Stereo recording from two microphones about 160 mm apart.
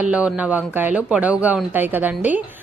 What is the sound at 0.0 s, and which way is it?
Speech, 10° right (ahead or behind).